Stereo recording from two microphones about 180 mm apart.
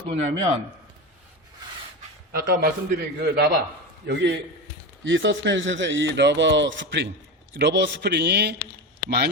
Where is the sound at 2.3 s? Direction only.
55° right (ahead or behind); by 4.3 s 75° right (ahead or behind).